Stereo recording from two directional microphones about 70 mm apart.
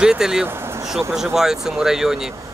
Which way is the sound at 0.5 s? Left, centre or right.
Right.